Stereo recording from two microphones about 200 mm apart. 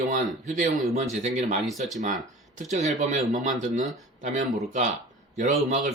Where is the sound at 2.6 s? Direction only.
35° right (ahead or behind).